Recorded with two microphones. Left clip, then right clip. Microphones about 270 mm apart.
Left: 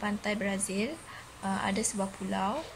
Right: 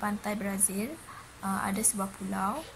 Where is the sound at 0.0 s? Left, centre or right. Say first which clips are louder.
Left 1 dB; centre.